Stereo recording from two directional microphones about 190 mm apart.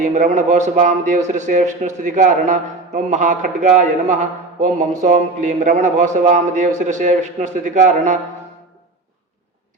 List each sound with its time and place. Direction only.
0.0 s a man's voice: 40° right (ahead or behind)